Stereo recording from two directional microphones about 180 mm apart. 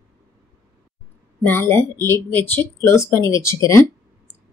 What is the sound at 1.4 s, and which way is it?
Speech, 10° left (ahead or behind).